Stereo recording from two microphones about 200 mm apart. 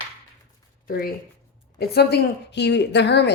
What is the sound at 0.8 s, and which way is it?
A woman's voice, 45° left (ahead or behind).